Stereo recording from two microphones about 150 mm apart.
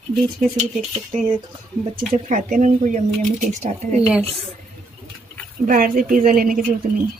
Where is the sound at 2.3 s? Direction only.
60° right (ahead or behind).